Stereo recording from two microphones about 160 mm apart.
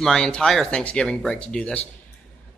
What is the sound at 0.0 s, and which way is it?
Speech, 5° left (ahead or behind).